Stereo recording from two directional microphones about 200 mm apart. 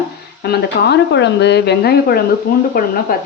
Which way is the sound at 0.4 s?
55° left (ahead or behind).